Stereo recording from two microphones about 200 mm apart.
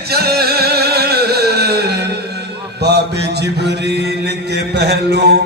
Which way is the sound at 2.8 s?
55° right (ahead or behind).